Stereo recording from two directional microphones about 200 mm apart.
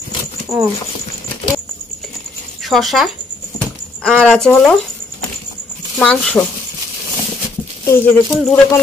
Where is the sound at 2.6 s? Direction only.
Centre (ahead or behind).